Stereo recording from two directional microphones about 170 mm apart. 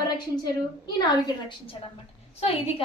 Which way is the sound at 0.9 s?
25° left (ahead or behind).